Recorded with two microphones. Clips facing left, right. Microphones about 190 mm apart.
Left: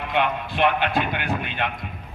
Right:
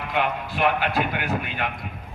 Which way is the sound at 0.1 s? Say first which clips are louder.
Left 1 dB; 25° left (ahead or behind).